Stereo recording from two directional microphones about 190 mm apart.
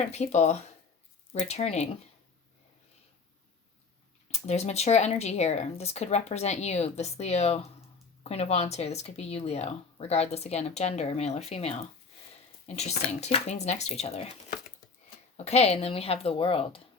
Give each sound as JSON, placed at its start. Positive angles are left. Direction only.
{"t": 0.0, "sound": "speech", "side_deg": 35}
{"t": 4.3, "sound": "speech", "side_deg": 35}
{"t": 15.4, "sound": "speech", "side_deg": 35}